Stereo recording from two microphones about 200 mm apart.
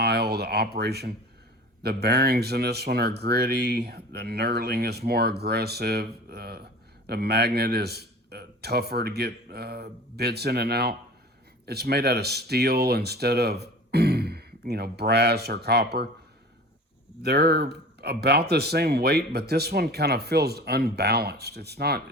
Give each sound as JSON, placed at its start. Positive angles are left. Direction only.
{"t": 0.0, "sound": "speech", "side_deg": -55}
{"t": 17.2, "sound": "speech", "side_deg": -55}